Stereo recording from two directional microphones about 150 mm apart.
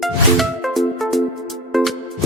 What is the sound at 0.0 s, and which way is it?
Music, centre (ahead or behind).